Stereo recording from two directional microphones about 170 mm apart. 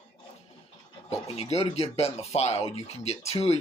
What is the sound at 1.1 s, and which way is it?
Speech, 40° left (ahead or behind).